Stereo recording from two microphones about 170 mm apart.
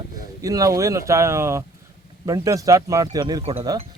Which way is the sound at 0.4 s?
20° right (ahead or behind).